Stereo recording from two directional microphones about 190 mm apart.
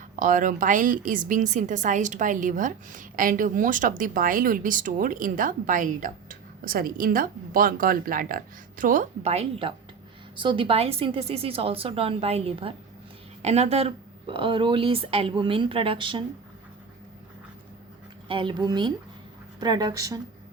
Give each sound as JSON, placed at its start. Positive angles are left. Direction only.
{"t": 0.2, "sound": "a woman's voice", "side_deg": -45}
{"t": 18.3, "sound": "speech", "side_deg": -25}